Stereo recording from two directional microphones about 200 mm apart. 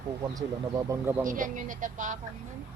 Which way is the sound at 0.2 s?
15° right (ahead or behind).